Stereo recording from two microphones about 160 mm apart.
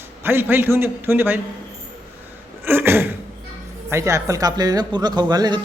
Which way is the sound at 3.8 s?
20° right (ahead or behind).